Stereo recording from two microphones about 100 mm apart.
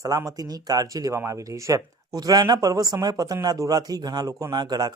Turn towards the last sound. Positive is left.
turn(degrees=-40)  # may be behind; listen again after turning